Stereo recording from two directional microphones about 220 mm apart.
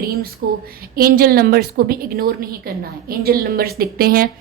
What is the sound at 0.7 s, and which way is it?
A woman's voice, 45° right (ahead or behind).